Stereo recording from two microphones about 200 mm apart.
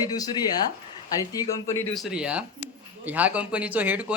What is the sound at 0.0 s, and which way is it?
Speech, 20° left (ahead or behind).